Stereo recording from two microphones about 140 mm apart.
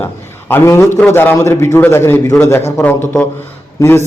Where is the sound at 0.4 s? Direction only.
15° left (ahead or behind).